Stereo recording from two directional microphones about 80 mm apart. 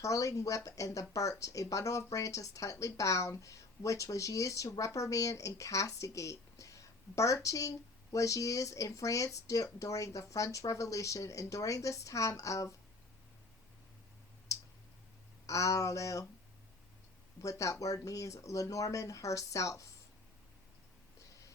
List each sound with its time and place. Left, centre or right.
0.0 s speech: left
14.5 s clicking: left
15.4 s speech: left
17.4 s speech: left